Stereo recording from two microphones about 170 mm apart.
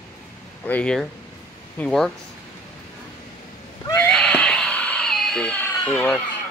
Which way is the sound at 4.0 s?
5° left (ahead or behind).